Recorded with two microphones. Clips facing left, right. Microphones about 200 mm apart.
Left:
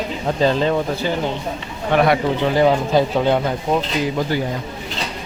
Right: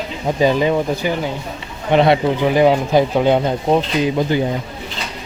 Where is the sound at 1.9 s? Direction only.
25° right (ahead or behind).